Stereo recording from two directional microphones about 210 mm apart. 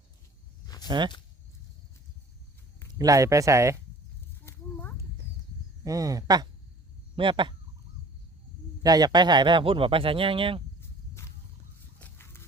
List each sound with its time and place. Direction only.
0.9 s speech: 20° right (ahead or behind)
3.0 s speech: 15° right (ahead or behind)
4.4 s a sound: 10° left (ahead or behind)
5.8 s speech: 15° right (ahead or behind)
8.8 s speech: 20° right (ahead or behind)
11.1 s a sound: 10° left (ahead or behind)
11.9 s biting: 10° left (ahead or behind)